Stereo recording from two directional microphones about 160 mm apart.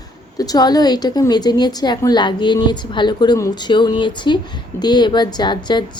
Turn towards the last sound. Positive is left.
turn(degrees=30)  # may be behind; listen again after turning